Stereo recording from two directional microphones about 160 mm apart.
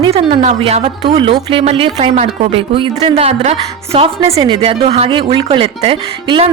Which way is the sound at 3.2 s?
40° right (ahead or behind).